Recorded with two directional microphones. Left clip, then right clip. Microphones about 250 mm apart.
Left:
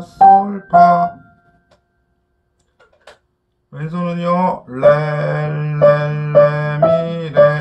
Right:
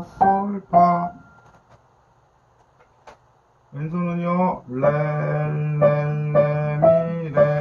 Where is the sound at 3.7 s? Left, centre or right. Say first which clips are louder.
Left 5 dB; centre.